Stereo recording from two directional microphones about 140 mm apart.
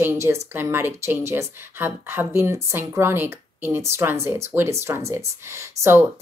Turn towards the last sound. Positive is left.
turn(degrees=-20)  # may be behind; listen again after turning